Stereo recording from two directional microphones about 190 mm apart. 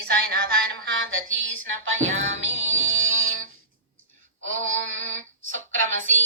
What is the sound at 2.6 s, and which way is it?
Music, 40° right (ahead or behind).